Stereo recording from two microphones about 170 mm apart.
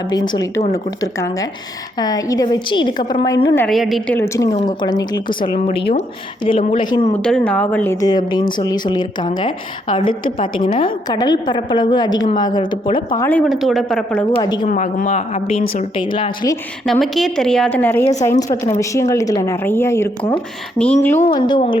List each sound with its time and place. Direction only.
0.1 s a woman's voice: 25° left (ahead or behind)
3.7 s a woman's voice: centre (ahead or behind)
4.1 s speech: 15° left (ahead or behind)
4.6 s a woman's voice: 25° left (ahead or behind)
7.1 s speech: 5° left (ahead or behind)
8.0 s a woman's voice: 25° left (ahead or behind)
10.4 s a woman's voice: 50° left (ahead or behind)
10.8 s a woman's voice: 25° left (ahead or behind)
13.4 s a woman's voice: centre (ahead or behind)
14.3 s a woman's voice: 30° left (ahead or behind)
14.7 s speech: 50° left (ahead or behind); by 16.6 s 25° left (ahead or behind)
16.8 s a woman's voice: centre (ahead or behind)
21.3 s a woman's voice: 25° left (ahead or behind)